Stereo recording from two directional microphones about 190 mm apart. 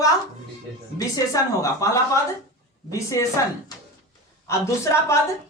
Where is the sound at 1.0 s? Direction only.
15° left (ahead or behind).